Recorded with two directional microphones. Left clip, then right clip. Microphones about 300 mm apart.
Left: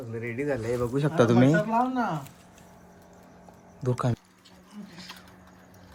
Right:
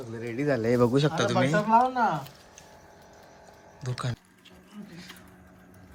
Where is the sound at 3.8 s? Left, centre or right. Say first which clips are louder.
Left 7 dB; centre.